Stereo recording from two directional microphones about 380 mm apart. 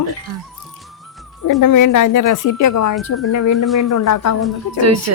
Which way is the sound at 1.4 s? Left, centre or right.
Left.